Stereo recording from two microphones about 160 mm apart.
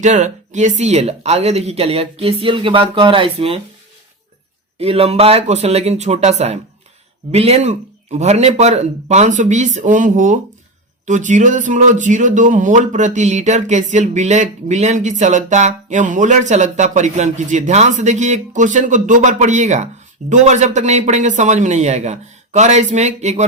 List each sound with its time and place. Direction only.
0.0 s speech: 50° right (ahead or behind)
4.8 s speech: 40° right (ahead or behind)